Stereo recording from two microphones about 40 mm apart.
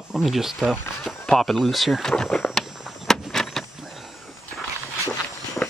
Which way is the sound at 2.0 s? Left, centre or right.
Centre.